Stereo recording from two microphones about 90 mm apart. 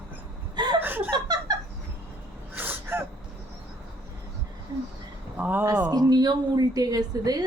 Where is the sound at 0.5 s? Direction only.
50° right (ahead or behind).